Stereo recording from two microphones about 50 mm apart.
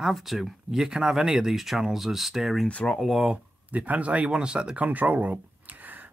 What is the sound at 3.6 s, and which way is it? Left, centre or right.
Speech, right.